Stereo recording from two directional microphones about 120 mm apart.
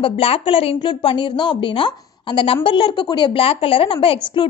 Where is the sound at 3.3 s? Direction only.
50° left (ahead or behind).